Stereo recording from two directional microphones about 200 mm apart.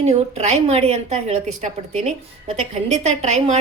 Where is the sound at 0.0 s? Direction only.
30° right (ahead or behind).